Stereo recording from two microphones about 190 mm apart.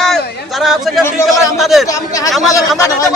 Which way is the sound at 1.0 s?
15° left (ahead or behind).